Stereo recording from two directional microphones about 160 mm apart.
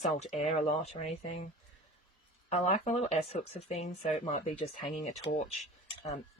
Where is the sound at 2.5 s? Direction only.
45° left (ahead or behind).